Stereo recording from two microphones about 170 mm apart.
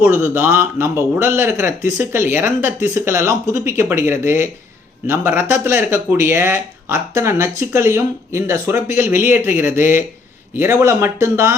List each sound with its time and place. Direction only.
0.0 s speech: 15° right (ahead or behind)